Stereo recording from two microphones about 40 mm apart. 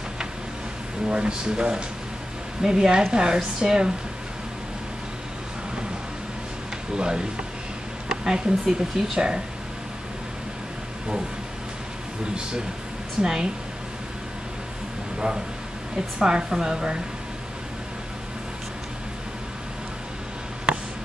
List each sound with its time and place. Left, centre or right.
1.0 s speech: right
7.0 s speech: right
12.4 s speech: right
15.1 s speech: right